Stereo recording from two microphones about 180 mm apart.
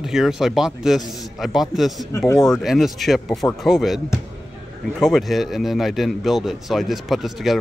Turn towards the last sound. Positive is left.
turn(degrees=0)  # may be behind; listen again after turning